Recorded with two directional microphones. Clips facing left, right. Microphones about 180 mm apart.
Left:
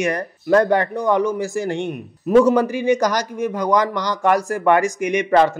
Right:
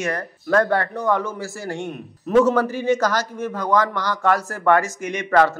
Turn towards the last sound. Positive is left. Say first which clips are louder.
# left 3 dB
turn(degrees=20)  # may be behind; listen again after turning